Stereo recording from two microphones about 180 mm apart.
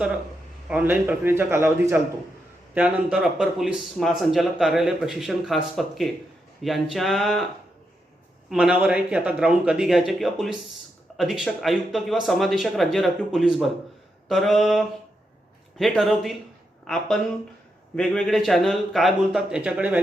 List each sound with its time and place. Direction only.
0.7 s a man's voice: 10° right (ahead or behind)
8.4 s speech: 5° right (ahead or behind)